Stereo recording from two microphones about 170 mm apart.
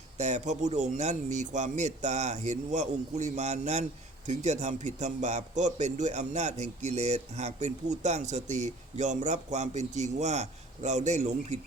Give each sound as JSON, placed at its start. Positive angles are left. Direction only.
{"t": 0.2, "sound": "speech", "side_deg": -40}